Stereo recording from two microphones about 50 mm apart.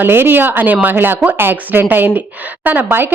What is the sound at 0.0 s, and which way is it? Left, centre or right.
A woman's voice, right.